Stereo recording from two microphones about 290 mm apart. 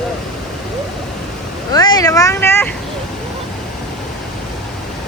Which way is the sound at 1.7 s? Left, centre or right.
Centre.